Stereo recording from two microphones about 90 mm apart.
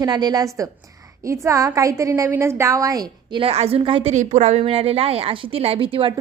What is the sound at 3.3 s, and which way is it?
A woman's voice, 85° right.